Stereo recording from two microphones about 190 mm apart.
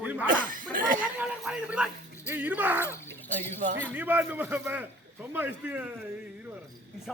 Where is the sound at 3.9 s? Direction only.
10° right (ahead or behind).